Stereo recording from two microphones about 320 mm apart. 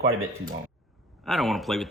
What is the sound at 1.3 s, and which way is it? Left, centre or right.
Speech, centre.